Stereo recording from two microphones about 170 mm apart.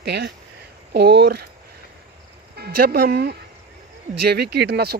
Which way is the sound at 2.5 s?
65° right (ahead or behind).